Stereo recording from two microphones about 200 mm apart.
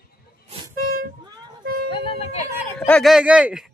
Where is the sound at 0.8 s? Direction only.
45° right (ahead or behind).